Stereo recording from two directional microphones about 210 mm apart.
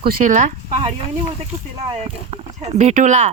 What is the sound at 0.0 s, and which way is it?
Speech, 40° right (ahead or behind).